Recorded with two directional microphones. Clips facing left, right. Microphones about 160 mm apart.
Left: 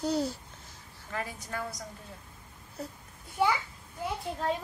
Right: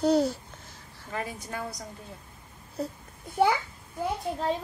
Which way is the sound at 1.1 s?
20° right (ahead or behind).